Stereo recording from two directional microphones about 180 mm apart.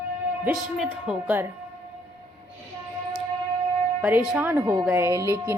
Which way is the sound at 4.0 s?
5° right (ahead or behind).